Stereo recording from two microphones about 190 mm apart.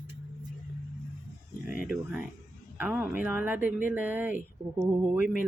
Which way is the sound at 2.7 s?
5° right (ahead or behind).